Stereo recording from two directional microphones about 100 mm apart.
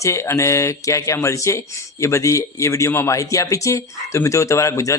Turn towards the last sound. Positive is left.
turn(degrees=30)  # may be behind; listen again after turning